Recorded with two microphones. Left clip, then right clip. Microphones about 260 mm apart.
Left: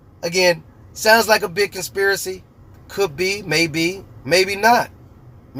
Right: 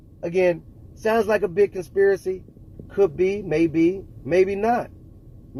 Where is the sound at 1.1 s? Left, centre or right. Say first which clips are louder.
Left 4 dB; centre.